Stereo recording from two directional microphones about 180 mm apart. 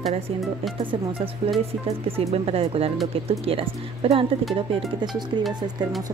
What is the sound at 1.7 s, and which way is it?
Speech, 35° right (ahead or behind).